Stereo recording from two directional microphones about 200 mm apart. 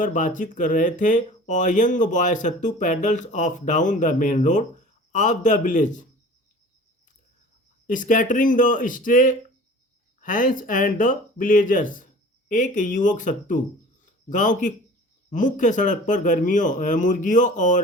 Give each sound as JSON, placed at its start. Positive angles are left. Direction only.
{"t": 0.0, "sound": "speech", "side_deg": 40}
{"t": 7.9, "sound": "speech", "side_deg": 40}